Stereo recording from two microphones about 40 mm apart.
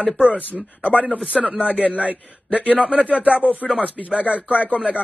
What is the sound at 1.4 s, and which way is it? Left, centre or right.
Speech, right.